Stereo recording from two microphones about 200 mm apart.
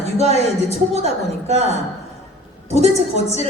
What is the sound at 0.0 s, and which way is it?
Music, 35° right (ahead or behind).